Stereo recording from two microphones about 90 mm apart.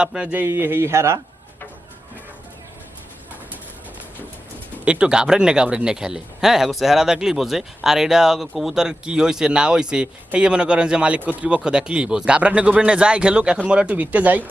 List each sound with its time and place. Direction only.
0.0 s speech: 10° right (ahead or behind); by 1.2 s 30° right (ahead or behind)
4.9 s speech: 10° right (ahead or behind)